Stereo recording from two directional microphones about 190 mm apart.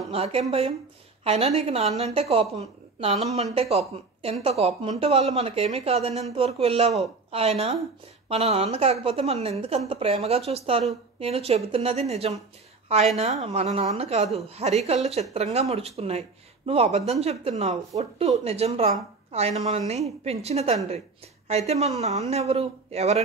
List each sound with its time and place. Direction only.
0.1 s speech: 30° right (ahead or behind)